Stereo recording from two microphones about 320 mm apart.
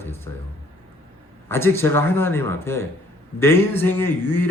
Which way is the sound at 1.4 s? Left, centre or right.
Centre.